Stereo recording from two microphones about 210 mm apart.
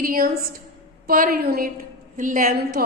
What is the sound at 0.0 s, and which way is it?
A woman's voice, 45° right (ahead or behind).